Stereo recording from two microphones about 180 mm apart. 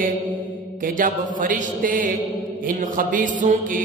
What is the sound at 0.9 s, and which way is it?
Mantra, 50° right (ahead or behind).